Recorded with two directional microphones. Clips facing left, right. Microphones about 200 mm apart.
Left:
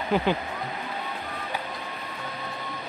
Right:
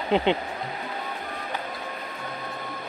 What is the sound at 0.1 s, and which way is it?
Speech, 25° right (ahead or behind).